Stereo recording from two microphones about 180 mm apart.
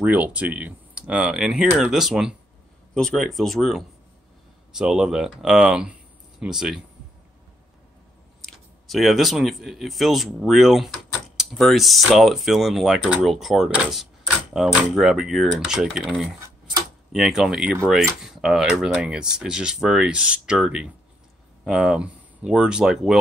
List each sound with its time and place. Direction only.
0.0 s speech: 5° right (ahead or behind)
8.4 s speech: centre (ahead or behind)